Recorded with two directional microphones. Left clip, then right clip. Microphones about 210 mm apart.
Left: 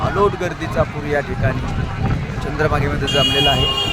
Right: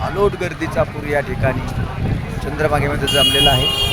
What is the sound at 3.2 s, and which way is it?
Speech, 15° right (ahead or behind).